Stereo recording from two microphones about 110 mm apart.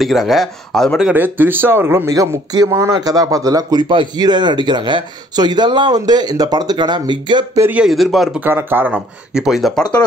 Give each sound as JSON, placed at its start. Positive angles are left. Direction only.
{"t": 0.0, "sound": "speech", "side_deg": 0}
{"t": 1.0, "sound": "speech", "side_deg": -15}
{"t": 3.9, "sound": "speech", "side_deg": -45}
{"t": 7.7, "sound": "speech", "side_deg": -5}
{"t": 8.5, "sound": "speech", "side_deg": -20}